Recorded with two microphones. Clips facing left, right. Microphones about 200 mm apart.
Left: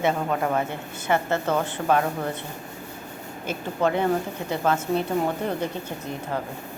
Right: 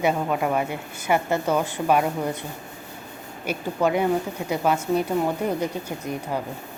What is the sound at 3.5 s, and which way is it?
Speech, 15° right (ahead or behind).